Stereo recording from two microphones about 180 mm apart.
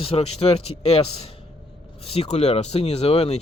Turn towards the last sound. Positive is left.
turn(degrees=35)  # may be behind; listen again after turning